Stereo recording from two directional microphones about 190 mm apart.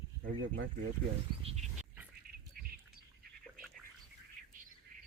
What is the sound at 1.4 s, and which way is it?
Wild animals, 30° right (ahead or behind).